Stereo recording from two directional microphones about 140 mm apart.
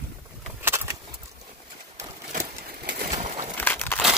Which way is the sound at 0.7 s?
20° right (ahead or behind).